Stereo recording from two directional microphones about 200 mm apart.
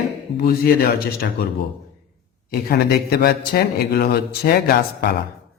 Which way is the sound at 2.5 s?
50° left (ahead or behind).